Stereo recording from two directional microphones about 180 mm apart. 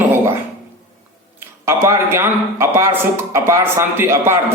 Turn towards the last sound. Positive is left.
turn(degrees=-15)  # may be behind; listen again after turning